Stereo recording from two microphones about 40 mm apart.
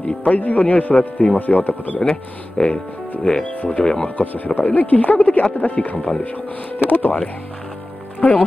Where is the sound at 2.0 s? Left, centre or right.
Centre.